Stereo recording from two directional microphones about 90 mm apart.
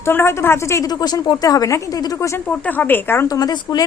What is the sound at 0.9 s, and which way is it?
Speech, 50° left (ahead or behind).